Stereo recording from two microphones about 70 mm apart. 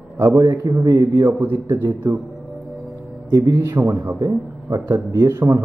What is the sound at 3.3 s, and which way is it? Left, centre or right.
Speech, right.